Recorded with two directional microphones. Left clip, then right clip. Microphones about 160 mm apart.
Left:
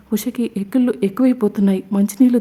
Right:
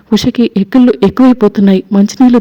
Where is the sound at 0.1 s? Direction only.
30° right (ahead or behind).